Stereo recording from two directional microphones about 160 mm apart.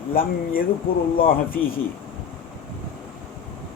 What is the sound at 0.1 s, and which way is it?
Speech, 65° left (ahead or behind).